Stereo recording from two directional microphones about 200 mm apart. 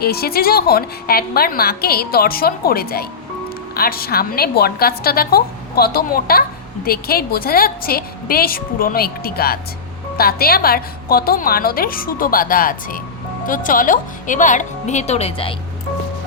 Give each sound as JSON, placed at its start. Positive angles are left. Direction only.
{"t": 0.0, "sound": "a woman's voice", "side_deg": 50}